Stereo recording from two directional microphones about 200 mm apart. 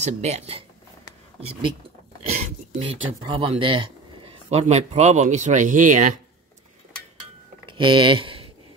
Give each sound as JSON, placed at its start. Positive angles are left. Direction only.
{"t": 0.0, "sound": "speech", "side_deg": -35}
{"t": 2.8, "sound": "speech", "side_deg": -25}
{"t": 7.6, "sound": "speech", "side_deg": -25}